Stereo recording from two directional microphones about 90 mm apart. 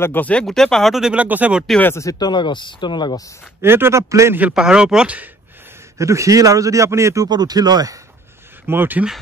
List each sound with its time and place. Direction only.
0.0 s speech: 20° left (ahead or behind)
0.5 s speech: 5° left (ahead or behind)
1.1 s speech: 15° right (ahead or behind)
2.0 s speech: 45° left (ahead or behind)
3.6 s a man's voice: 25° right (ahead or behind)
4.4 s speech: 10° right (ahead or behind)
5.9 s a man's voice: 35° right (ahead or behind)
7.2 s speech: 50° right (ahead or behind)
8.6 s a man's voice: 20° right (ahead or behind)